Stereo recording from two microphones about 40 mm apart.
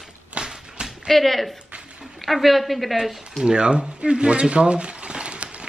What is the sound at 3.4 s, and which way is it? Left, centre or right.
Speech, right.